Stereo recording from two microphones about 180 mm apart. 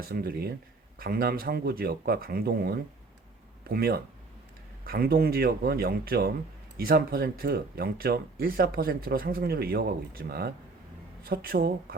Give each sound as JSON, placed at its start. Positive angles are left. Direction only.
{"t": 0.0, "sound": "speech", "side_deg": -55}